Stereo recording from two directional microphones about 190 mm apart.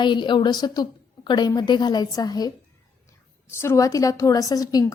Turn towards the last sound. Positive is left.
turn(degrees=20)  # may be behind; listen again after turning